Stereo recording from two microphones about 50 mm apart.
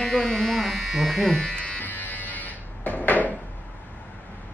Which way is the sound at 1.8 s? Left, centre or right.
Left.